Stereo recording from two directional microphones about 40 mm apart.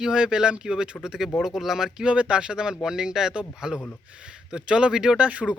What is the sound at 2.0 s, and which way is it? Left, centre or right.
Speech, right.